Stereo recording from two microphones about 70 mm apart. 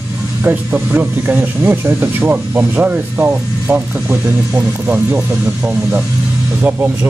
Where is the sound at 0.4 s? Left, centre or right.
Right.